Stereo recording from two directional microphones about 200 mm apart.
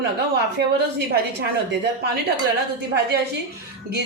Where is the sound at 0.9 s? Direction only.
55° right (ahead or behind).